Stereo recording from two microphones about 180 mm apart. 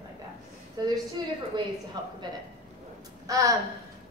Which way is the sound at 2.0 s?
20° right (ahead or behind).